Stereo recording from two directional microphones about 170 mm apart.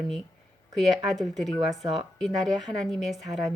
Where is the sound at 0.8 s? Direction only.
Centre (ahead or behind).